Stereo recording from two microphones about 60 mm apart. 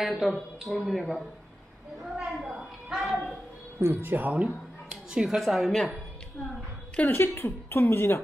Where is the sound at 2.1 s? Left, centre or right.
Centre.